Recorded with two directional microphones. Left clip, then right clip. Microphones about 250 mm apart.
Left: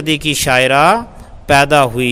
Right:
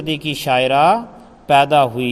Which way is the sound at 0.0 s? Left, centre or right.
Left.